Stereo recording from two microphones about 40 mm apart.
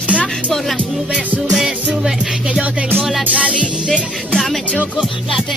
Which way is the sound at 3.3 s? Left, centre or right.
Right.